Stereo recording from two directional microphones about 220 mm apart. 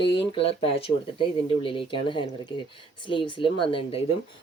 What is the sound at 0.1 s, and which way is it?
Speech, 20° left (ahead or behind).